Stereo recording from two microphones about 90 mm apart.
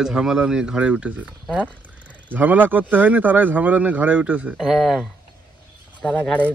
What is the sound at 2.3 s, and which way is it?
A man's voice, 20° right (ahead or behind).